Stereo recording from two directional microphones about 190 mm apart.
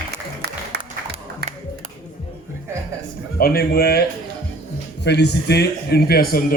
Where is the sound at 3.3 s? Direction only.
50° left (ahead or behind).